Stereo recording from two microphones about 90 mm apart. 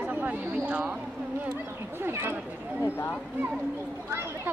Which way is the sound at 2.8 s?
30° left (ahead or behind).